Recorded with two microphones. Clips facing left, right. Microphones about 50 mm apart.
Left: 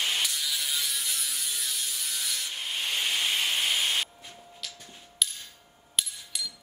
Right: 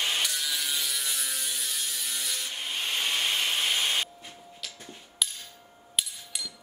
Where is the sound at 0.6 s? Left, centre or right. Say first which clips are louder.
Even; centre.